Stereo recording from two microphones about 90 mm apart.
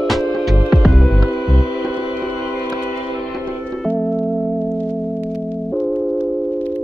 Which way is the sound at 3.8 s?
15° left (ahead or behind).